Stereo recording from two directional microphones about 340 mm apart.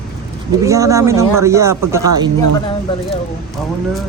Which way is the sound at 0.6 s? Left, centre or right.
Centre.